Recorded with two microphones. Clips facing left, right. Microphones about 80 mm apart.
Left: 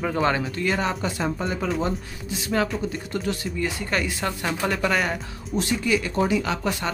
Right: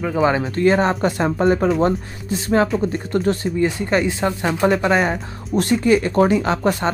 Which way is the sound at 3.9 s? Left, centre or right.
Right.